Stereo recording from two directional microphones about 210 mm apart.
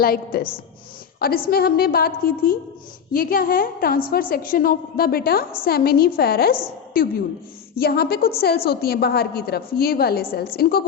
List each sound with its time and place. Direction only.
0.0 s a woman's voice: 45° left (ahead or behind)
1.5 s a woman's voice: 45° left (ahead or behind)